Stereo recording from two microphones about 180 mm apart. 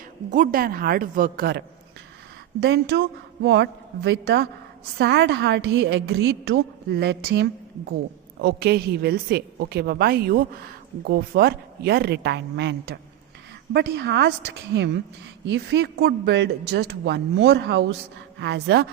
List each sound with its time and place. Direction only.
0.3 s a woman's voice: 45° right (ahead or behind); by 18.9 s 65° right (ahead or behind)